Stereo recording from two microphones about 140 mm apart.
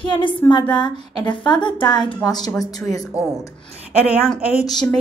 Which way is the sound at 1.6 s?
35° left (ahead or behind).